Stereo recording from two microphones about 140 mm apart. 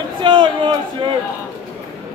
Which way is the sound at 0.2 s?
35° right (ahead or behind).